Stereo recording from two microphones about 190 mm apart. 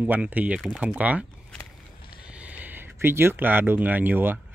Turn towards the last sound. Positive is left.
turn(degrees=-10)  # may be behind; listen again after turning